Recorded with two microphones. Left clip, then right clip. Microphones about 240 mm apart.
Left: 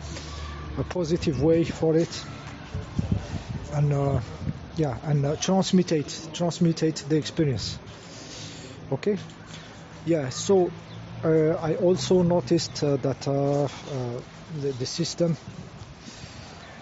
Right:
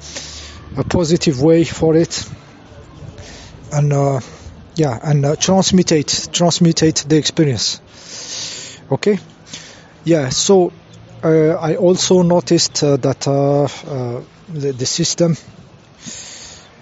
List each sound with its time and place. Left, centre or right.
0.7 s speech: right
3.7 s speech: right